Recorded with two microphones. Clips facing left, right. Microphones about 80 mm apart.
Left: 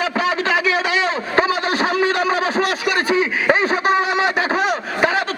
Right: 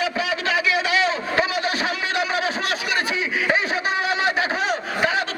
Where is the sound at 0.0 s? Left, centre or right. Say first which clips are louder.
Left 4 dB; left.